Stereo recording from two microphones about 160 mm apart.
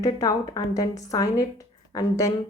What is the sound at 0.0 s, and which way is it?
A woman's voice, 20° left (ahead or behind).